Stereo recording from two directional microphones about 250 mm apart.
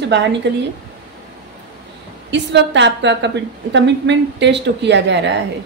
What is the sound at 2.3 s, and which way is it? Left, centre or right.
A woman's voice, right.